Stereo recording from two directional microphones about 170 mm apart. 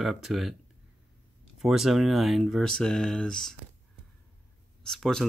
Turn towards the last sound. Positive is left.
turn(degrees=5)  # may be behind; listen again after turning